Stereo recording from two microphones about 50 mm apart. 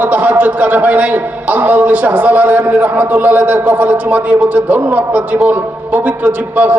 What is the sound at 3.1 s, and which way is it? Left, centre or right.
A man's voice, right.